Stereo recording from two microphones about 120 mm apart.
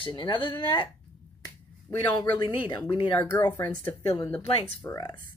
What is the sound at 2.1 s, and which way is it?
Speech, 40° left (ahead or behind).